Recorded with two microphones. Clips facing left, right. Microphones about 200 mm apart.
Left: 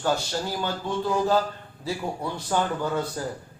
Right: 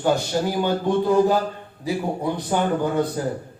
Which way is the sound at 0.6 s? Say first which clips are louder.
Right 9 dB; 55° right (ahead or behind).